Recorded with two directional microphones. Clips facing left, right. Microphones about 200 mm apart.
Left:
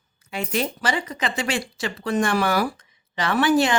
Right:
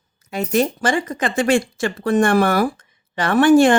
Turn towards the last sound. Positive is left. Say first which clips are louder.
# right 7 dB
turn(degrees=-50)  # may be behind; listen again after turning